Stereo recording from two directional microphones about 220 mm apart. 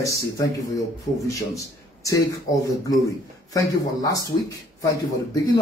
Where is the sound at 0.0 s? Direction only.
15° left (ahead or behind).